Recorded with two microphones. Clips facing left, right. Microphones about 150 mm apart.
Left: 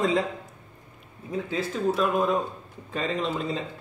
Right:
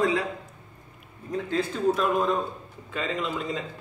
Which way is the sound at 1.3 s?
5° left (ahead or behind).